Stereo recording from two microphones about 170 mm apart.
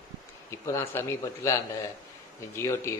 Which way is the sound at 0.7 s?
15° left (ahead or behind).